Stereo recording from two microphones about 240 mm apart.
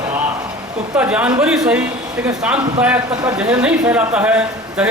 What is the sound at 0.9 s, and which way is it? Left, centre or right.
Speech, centre.